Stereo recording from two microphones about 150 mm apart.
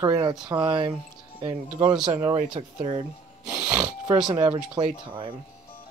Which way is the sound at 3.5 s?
10° right (ahead or behind).